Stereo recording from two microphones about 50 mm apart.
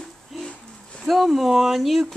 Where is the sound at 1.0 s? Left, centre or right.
Centre.